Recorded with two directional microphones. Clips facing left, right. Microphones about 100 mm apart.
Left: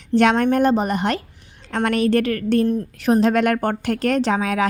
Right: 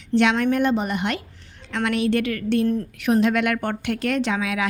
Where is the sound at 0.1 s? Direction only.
45° left (ahead or behind).